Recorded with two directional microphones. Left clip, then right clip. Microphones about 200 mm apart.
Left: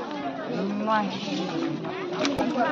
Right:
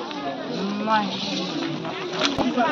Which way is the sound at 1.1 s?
50° left (ahead or behind).